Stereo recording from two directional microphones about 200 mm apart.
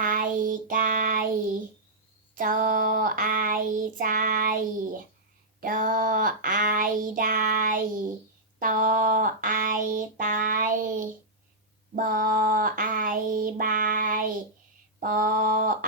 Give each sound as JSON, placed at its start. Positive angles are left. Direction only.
{"t": 0.0, "sound": "child singing", "side_deg": -40}
{"t": 2.3, "sound": "child singing", "side_deg": -45}
{"t": 8.5, "sound": "a sound", "side_deg": -45}
{"t": 11.9, "sound": "child singing", "side_deg": -45}